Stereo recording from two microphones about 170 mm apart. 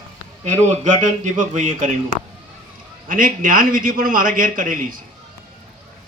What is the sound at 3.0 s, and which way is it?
A man's voice, 55° right (ahead or behind).